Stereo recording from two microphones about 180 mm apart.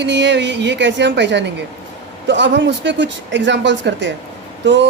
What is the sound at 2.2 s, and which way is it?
Speech, 90° right.